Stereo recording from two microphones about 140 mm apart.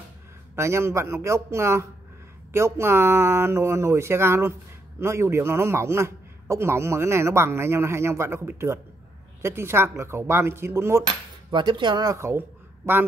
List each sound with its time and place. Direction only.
0.6 s a man's voice: 20° right (ahead or behind)
11.5 s speech: 35° right (ahead or behind); by 13.0 s 15° right (ahead or behind)